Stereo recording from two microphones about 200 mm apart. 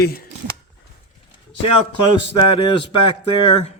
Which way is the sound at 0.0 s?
50° left (ahead or behind).